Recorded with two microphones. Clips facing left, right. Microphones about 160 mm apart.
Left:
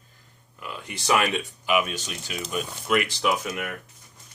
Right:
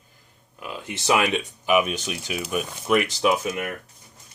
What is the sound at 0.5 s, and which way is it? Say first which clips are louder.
Speech: right 3 dB; 20° right (ahead or behind).